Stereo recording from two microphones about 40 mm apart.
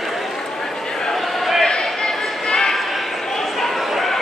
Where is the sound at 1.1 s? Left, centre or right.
Centre.